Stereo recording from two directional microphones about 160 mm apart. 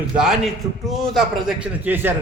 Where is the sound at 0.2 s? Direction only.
Centre (ahead or behind).